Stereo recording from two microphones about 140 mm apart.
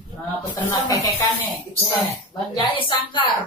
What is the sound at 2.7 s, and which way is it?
Speech, 35° left (ahead or behind).